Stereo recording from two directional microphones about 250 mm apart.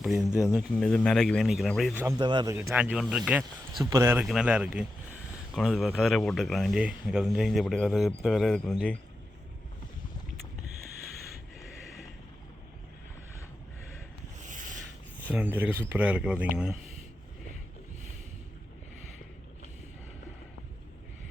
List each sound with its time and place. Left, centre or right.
0.0 s speech: centre
2.0 s a man's voice: centre
2.6 s speech: centre
14.3 s sanding: right
15.3 s speech: centre